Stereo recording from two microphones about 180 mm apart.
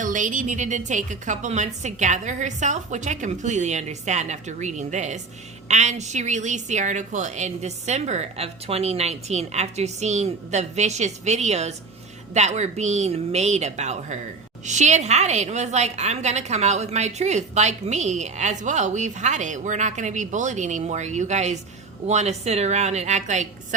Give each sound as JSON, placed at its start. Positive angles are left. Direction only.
{"t": 0.0, "sound": "a woman's voice", "side_deg": -45}